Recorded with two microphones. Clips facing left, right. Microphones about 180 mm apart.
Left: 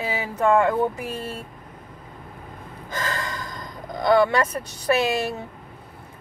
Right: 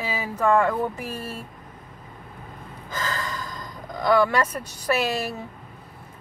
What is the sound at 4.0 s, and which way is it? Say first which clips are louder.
Speech: left 2 dB; 25° left (ahead or behind).